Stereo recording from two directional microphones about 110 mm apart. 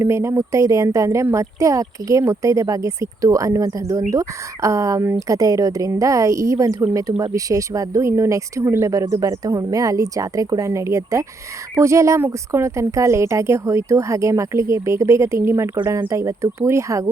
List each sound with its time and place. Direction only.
0.0 s speech: 25° right (ahead or behind)